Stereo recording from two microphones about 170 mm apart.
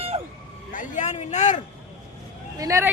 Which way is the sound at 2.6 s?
20° right (ahead or behind).